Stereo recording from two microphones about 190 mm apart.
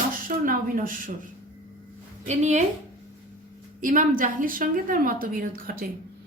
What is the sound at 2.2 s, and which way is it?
Speech, 35° right (ahead or behind).